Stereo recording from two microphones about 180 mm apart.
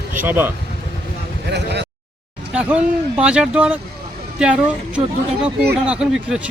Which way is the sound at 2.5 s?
5° right (ahead or behind).